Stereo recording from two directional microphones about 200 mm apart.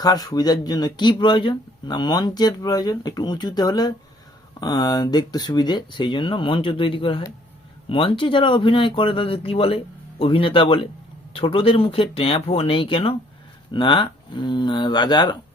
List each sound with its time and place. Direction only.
0.0 s speech: 20° left (ahead or behind)